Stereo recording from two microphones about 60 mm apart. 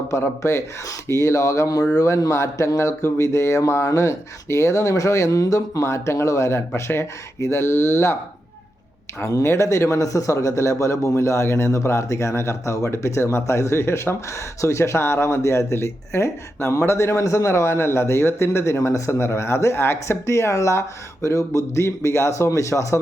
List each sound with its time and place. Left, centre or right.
0.1 s a man's voice: left
9.2 s a man's voice: left